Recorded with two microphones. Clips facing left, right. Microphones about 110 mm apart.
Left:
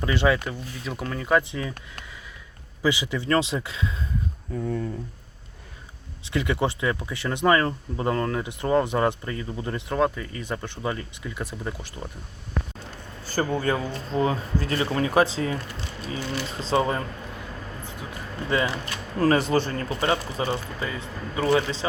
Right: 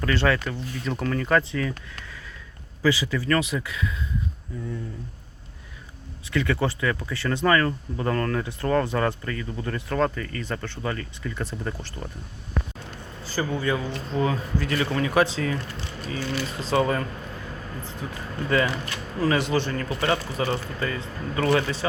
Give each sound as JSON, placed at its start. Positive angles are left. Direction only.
{"t": 0.0, "sound": "speech", "side_deg": 15}
{"t": 2.8, "sound": "speech", "side_deg": 20}
{"t": 4.5, "sound": "speech", "side_deg": 50}
{"t": 6.3, "sound": "speech", "side_deg": 20}
{"t": 13.2, "sound": "a man's voice", "side_deg": 50}
{"t": 14.2, "sound": "speech", "side_deg": 30}
{"t": 18.4, "sound": "speech", "side_deg": 25}
{"t": 19.2, "sound": "speech", "side_deg": 40}